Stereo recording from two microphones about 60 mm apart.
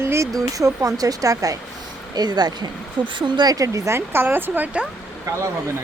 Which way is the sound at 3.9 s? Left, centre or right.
Right.